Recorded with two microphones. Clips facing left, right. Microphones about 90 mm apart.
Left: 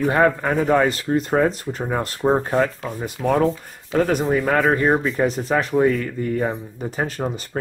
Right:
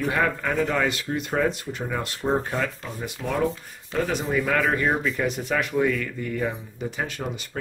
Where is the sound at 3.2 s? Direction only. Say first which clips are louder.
Left 10 dB; 25° left (ahead or behind).